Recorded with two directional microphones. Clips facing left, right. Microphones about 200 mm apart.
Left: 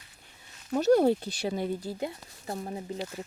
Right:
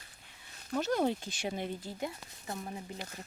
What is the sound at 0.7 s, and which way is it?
Speech, 40° left (ahead or behind).